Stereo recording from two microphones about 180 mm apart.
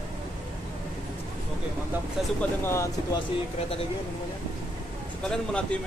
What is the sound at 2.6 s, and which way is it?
Speech, 15° left (ahead or behind).